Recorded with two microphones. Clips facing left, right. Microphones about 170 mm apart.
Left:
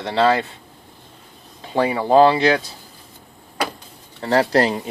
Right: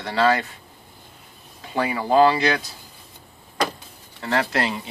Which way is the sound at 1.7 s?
30° left (ahead or behind).